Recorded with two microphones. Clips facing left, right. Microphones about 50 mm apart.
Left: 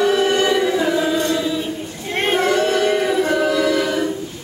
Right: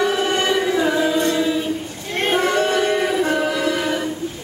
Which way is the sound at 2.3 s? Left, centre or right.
Centre.